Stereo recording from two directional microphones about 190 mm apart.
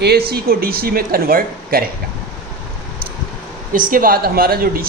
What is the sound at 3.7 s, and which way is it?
Speech, 45° right (ahead or behind).